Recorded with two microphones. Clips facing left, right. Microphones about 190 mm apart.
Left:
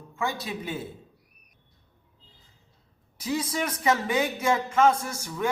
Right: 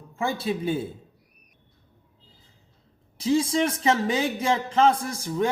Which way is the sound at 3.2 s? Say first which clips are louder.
Right 7 dB; 30° right (ahead or behind).